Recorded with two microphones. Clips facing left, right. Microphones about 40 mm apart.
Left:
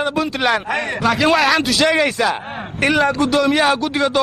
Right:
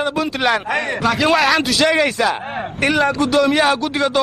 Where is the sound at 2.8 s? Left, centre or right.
Left.